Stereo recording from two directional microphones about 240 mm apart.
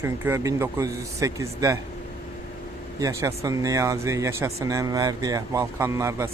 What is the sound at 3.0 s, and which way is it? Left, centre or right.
Speech, centre.